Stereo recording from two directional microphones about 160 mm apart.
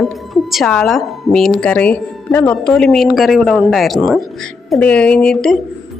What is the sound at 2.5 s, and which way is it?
A woman's voice, 5° left (ahead or behind).